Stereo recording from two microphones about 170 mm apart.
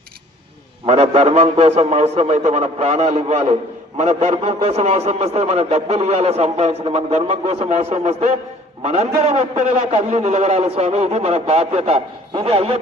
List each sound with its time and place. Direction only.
0.9 s a man's voice: 35° right (ahead or behind)